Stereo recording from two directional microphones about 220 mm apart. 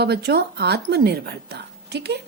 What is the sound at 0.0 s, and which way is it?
Speech, 50° right (ahead or behind).